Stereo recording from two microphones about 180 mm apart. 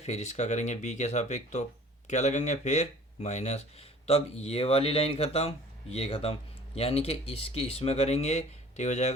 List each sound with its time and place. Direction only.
0.0 s speech: 35° left (ahead or behind)